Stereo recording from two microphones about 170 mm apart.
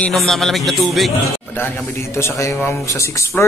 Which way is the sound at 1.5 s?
15° left (ahead or behind).